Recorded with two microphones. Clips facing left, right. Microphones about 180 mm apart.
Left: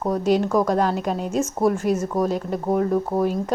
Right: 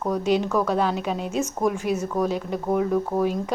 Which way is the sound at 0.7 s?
40° left (ahead or behind).